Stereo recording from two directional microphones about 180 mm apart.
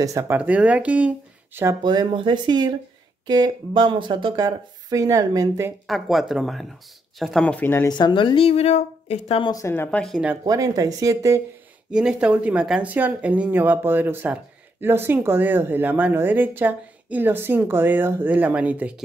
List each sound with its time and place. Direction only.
0.0 s speech: 15° right (ahead or behind)
1.8 s speech: 25° right (ahead or behind)
5.9 s speech: centre (ahead or behind)
8.0 s a woman's voice: 25° left (ahead or behind)
9.5 s speech: 15° left (ahead or behind); by 10.3 s centre (ahead or behind)
10.4 s speech: 20° right (ahead or behind)
11.9 s speech: 5° right (ahead or behind)